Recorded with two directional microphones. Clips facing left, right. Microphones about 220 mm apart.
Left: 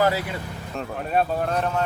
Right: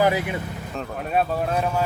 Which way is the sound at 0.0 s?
20° right (ahead or behind).